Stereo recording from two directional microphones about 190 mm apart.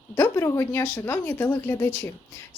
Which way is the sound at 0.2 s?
15° left (ahead or behind).